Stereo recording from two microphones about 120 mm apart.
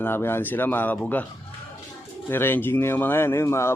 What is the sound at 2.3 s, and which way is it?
Speech, 20° left (ahead or behind).